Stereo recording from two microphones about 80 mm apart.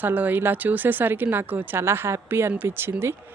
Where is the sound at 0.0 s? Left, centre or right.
Right.